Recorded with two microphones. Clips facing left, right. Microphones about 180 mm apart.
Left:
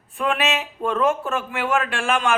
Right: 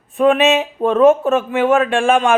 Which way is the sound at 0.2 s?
25° right (ahead or behind).